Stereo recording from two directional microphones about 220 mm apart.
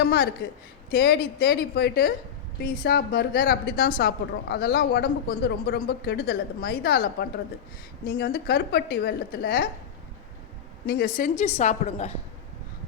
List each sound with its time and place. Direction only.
0.0 s a woman's voice: 45° left (ahead or behind)
10.8 s a woman's voice: 40° left (ahead or behind)